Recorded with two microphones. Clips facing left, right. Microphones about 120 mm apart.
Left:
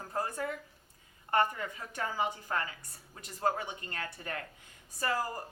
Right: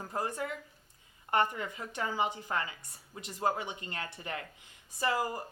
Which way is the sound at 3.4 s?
15° right (ahead or behind).